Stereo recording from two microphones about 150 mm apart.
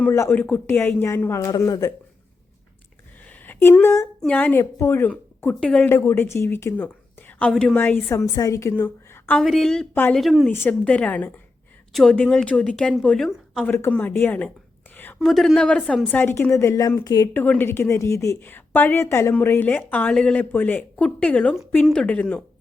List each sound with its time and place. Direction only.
0.0 s a woman's voice: 15° left (ahead or behind)
3.2 s a sound: 10° left (ahead or behind)
4.2 s a woman's voice: 10° left (ahead or behind)
9.4 s a woman's voice: centre (ahead or behind)
10.5 s a woman's voice: 15° left (ahead or behind)
15.2 s a woman's voice: centre (ahead or behind)
16.1 s a woman's voice: 15° left (ahead or behind)
17.3 s a woman's voice: 10° left (ahead or behind)